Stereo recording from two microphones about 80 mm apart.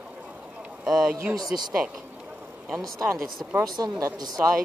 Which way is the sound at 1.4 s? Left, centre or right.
Right.